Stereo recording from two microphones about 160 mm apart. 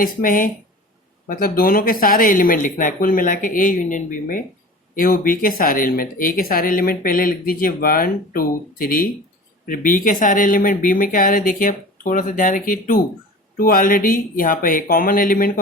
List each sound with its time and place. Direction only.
0.0 s speech: 60° left (ahead or behind)